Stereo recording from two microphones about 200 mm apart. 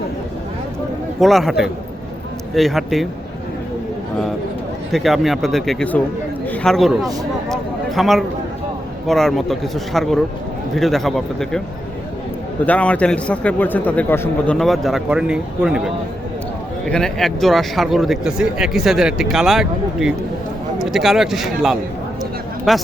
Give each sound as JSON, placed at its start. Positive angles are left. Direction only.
{"t": 1.2, "sound": "a man's voice", "side_deg": 0}
{"t": 4.9, "sound": "a man's voice", "side_deg": 0}
{"t": 7.5, "sound": "a sound", "side_deg": 0}
{"t": 9.0, "sound": "a man's voice", "side_deg": 0}
{"t": 12.6, "sound": "a man's voice", "side_deg": 5}